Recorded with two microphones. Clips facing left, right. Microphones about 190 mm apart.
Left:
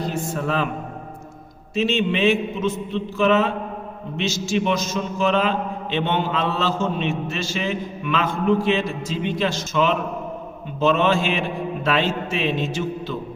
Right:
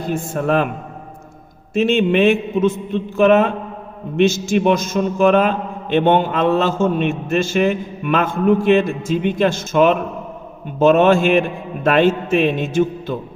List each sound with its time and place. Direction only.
0.1 s a man's voice: 55° right (ahead or behind)
1.7 s a man's voice: 55° right (ahead or behind)